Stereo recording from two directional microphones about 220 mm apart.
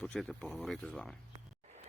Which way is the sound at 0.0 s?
5° left (ahead or behind).